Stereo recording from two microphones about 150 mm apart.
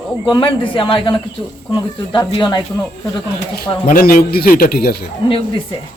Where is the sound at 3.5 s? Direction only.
80° left.